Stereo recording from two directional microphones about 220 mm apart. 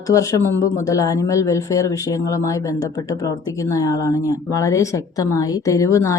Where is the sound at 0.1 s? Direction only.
15° left (ahead or behind).